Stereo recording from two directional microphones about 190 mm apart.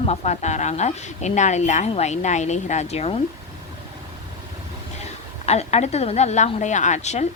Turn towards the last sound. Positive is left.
turn(degrees=35)  # may be behind; listen again after turning